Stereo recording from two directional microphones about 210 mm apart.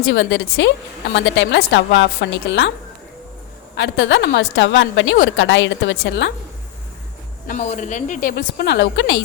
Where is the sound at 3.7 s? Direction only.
55° left (ahead or behind).